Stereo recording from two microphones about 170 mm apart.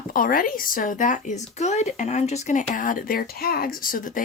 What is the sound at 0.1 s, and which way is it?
Speech, 55° left (ahead or behind).